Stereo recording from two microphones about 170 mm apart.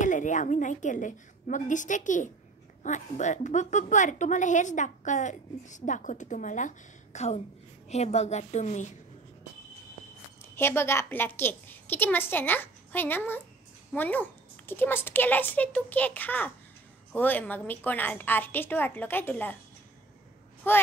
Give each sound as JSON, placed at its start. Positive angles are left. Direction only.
{"t": 0.0, "sound": "a woman's voice", "side_deg": 45}
{"t": 10.4, "sound": "a woman's voice", "side_deg": 15}
{"t": 20.7, "sound": "speech", "side_deg": 15}